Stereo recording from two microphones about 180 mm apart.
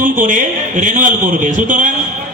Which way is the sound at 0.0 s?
45° right (ahead or behind).